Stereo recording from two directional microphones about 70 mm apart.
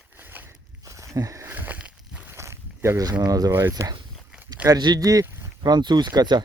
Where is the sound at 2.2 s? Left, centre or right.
Right.